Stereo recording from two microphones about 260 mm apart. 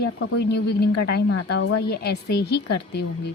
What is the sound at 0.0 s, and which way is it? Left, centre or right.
A woman's voice, left.